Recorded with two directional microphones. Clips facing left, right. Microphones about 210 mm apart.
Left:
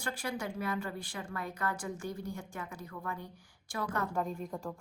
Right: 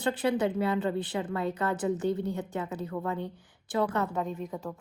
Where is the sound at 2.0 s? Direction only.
65° right (ahead or behind).